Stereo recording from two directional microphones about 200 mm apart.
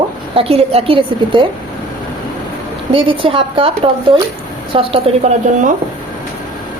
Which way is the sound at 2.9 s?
25° right (ahead or behind).